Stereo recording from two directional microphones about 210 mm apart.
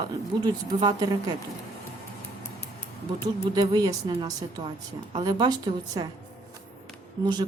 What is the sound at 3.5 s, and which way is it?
A woman's voice, 20° right (ahead or behind).